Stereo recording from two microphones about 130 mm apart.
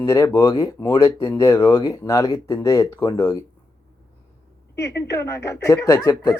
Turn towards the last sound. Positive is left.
turn(degrees=25)  # may be behind; listen again after turning